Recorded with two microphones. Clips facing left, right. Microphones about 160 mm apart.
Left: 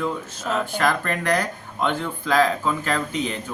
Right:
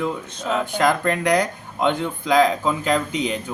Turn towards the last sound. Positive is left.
turn(degrees=-15)  # may be behind; listen again after turning